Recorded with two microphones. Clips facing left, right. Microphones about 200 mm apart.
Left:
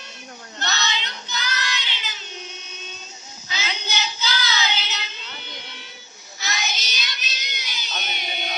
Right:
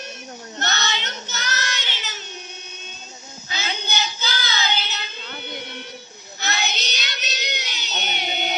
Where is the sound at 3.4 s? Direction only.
50° right (ahead or behind).